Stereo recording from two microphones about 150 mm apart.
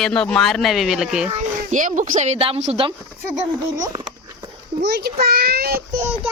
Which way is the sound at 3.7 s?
25° right (ahead or behind).